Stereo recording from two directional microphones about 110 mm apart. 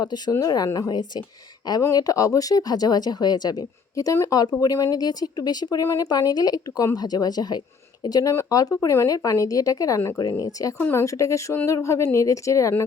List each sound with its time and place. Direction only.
0.0 s speech: 40° left (ahead or behind)
10.8 s speech: 15° left (ahead or behind)
11.0 s speech: 30° left (ahead or behind)